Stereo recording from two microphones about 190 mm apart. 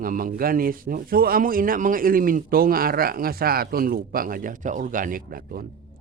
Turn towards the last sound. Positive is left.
turn(degrees=-50)  # may be behind; listen again after turning